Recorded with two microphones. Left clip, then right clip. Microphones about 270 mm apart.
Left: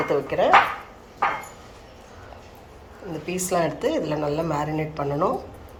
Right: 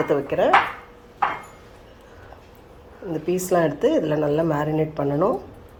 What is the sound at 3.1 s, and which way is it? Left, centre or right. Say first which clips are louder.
A woman's voice: right 4 dB; right.